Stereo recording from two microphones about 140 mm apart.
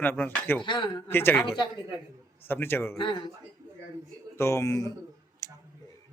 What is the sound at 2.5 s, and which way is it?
Speech, 15° left (ahead or behind).